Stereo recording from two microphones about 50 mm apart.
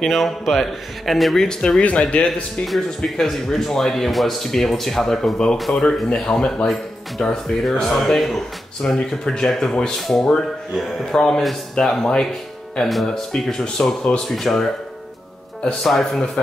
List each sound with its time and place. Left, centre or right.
0.0 s speech: centre
1.8 s speech: left
3.2 s speech: centre
11.1 s speech: centre
12.8 s speech: centre
15.8 s speech: centre